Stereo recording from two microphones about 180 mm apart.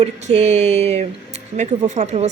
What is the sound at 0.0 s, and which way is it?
Speech, 40° right (ahead or behind).